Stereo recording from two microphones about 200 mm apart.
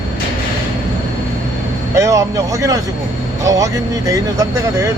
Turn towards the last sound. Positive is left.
turn(degrees=-15)  # may be behind; listen again after turning